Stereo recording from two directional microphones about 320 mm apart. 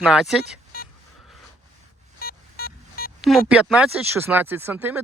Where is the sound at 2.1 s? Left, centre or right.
Left.